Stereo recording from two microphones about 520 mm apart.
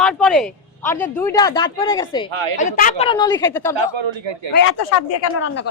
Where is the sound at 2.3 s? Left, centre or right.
Right.